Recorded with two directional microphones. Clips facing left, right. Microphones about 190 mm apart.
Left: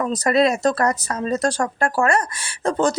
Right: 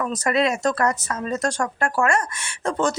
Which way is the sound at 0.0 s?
35° left (ahead or behind).